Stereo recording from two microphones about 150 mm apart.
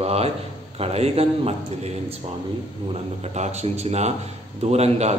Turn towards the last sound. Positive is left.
turn(degrees=-45)  # may be behind; listen again after turning